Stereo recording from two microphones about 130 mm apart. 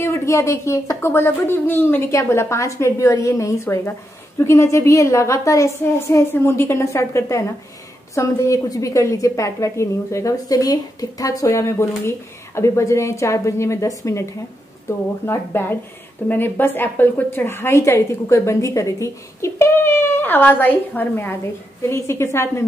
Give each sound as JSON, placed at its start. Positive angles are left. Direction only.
{"t": 0.0, "sound": "a woman's voice", "side_deg": 20}